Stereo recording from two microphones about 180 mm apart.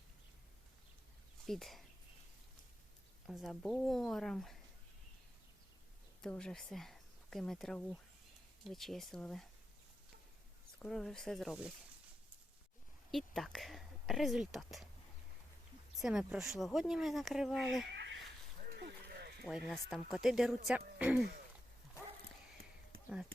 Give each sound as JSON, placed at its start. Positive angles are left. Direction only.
{"t": 1.5, "sound": "speech", "side_deg": 0}
{"t": 3.2, "sound": "speech", "side_deg": 0}
{"t": 6.2, "sound": "speech", "side_deg": 5}
{"t": 10.8, "sound": "speech", "side_deg": 0}
{"t": 13.1, "sound": "speech", "side_deg": 0}
{"t": 16.0, "sound": "speech", "side_deg": -5}
{"t": 17.9, "sound": "a sound", "side_deg": -75}
{"t": 18.6, "sound": "a sound", "side_deg": -60}
{"t": 19.5, "sound": "speech", "side_deg": 0}